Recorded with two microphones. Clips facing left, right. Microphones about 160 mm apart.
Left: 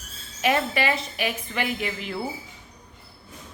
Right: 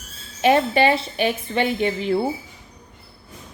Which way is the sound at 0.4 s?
30° right (ahead or behind).